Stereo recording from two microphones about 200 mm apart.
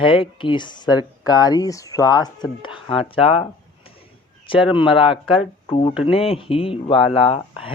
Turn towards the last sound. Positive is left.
turn(degrees=25)  # may be behind; listen again after turning